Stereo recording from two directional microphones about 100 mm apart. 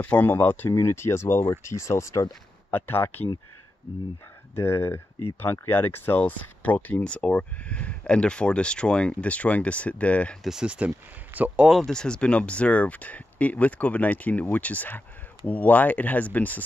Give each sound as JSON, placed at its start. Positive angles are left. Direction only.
{"t": 0.0, "sound": "speech", "side_deg": 15}
{"t": 2.7, "sound": "speech", "side_deg": 20}
{"t": 4.6, "sound": "speech", "side_deg": 25}
{"t": 10.4, "sound": "speech", "side_deg": -5}
{"t": 11.7, "sound": "speech", "side_deg": 5}